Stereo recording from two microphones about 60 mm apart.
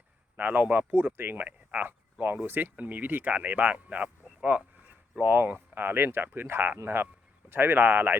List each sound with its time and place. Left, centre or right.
0.3 s speech: right